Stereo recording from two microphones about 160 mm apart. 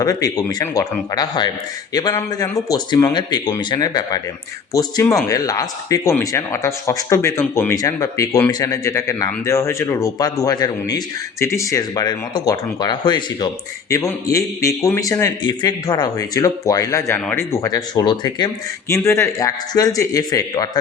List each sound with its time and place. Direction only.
0.0 s speech: 20° left (ahead or behind)